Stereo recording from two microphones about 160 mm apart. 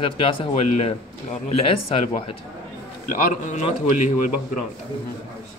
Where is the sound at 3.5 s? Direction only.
50° left (ahead or behind).